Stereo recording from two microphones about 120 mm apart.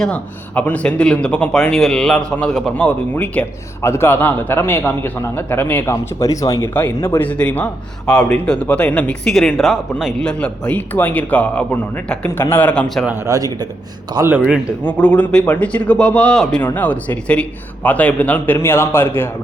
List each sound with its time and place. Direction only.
0.0 s speech: 10° left (ahead or behind)
5.9 s speech: 30° left (ahead or behind)
6.8 s speech: 15° left (ahead or behind)
13.2 s a man's voice: 30° right (ahead or behind)
14.8 s speech: 10° left (ahead or behind)